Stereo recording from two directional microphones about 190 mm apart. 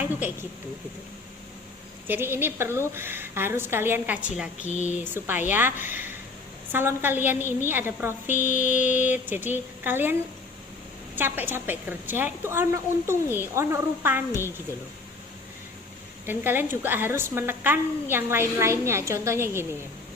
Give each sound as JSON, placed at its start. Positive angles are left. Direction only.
{"t": 2.0, "sound": "a woman's voice", "side_deg": -10}
{"t": 4.6, "sound": "mantra", "side_deg": 40}
{"t": 5.0, "sound": "a woman's voice", "side_deg": -10}
{"t": 8.4, "sound": "mantra", "side_deg": 40}
{"t": 8.9, "sound": "a woman's voice", "side_deg": -10}
{"t": 16.2, "sound": "a woman's voice", "side_deg": -10}